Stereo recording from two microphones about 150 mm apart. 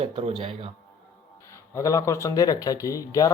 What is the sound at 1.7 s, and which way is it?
Speech, 20° left (ahead or behind).